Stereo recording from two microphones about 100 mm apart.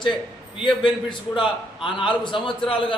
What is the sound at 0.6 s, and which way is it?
A man's voice, 55° left (ahead or behind).